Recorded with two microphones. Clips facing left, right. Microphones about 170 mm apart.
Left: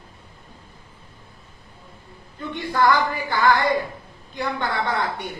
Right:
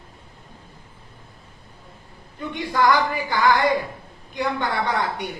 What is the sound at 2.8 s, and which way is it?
A man's voice, 15° right (ahead or behind).